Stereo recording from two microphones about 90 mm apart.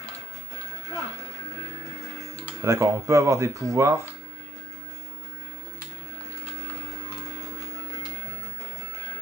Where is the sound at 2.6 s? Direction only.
35° right (ahead or behind).